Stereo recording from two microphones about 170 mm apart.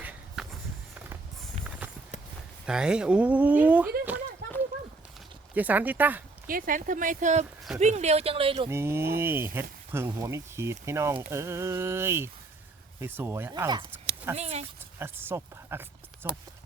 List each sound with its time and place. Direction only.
0.0 s walk: 10° right (ahead or behind)
2.6 s speech: 5° right (ahead or behind)
4.4 s a sound: 75° right (ahead or behind)
5.5 s speech: 10° right (ahead or behind)
6.5 s speech: 55° right (ahead or behind); by 8.7 s 30° right (ahead or behind)
8.7 s speech: 15° right (ahead or behind)
13.5 s speech: 25° right (ahead or behind)
14.3 s speech: 40° right (ahead or behind)
14.9 s speech: 15° right (ahead or behind)